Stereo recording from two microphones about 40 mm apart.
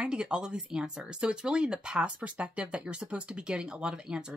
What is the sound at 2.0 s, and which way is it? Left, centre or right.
Speech, right.